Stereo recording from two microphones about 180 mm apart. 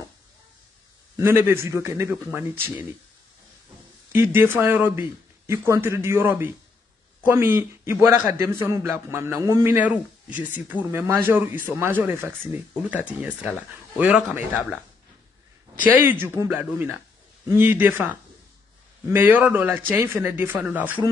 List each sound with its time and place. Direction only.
1.1 s a man's voice: 15° right (ahead or behind)
4.1 s a man's voice: 10° right (ahead or behind)
15.8 s a man's voice: 10° right (ahead or behind)